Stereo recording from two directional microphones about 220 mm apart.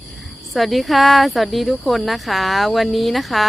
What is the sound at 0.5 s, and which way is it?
Speech, centre (ahead or behind).